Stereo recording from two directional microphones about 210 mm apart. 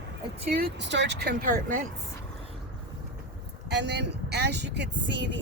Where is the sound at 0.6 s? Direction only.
55° right (ahead or behind); by 1.8 s 40° right (ahead or behind).